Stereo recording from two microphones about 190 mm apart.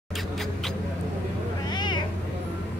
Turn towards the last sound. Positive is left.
turn(degrees=25)  # may be behind; listen again after turning